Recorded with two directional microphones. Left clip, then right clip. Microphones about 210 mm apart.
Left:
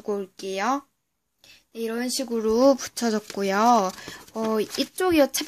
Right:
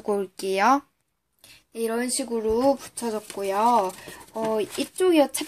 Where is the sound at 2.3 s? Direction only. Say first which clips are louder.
Left 3 dB; 30° left (ahead or behind).